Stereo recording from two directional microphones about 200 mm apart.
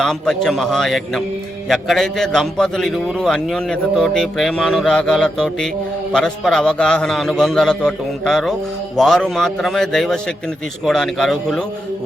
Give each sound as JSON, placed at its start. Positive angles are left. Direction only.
{"t": 0.0, "sound": "a man's voice", "side_deg": 0}